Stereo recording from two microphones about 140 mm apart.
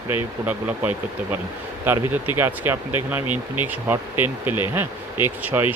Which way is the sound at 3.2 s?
35° left (ahead or behind).